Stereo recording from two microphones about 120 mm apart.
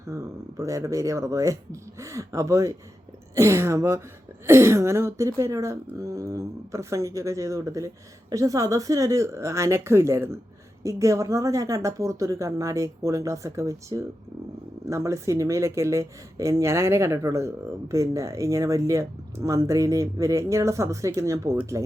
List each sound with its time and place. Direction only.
0.1 s speech: 25° right (ahead or behind)